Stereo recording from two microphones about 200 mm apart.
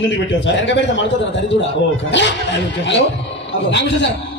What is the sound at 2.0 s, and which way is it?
Speech, 65° left (ahead or behind).